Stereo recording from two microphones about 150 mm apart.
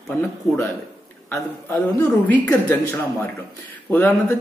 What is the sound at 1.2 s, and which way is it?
Speech, 15° left (ahead or behind).